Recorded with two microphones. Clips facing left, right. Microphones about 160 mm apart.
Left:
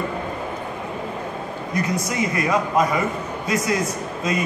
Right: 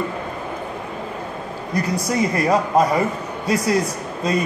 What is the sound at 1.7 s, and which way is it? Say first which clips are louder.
A man's voice: right 3 dB; 35° right (ahead or behind).